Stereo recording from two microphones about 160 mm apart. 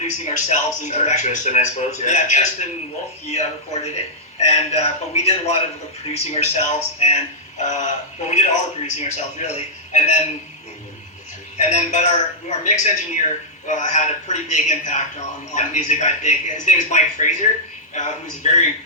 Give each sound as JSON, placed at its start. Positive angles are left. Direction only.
{"t": 0.0, "sound": "a man's voice", "side_deg": 45}
{"t": 11.5, "sound": "a man's voice", "side_deg": 45}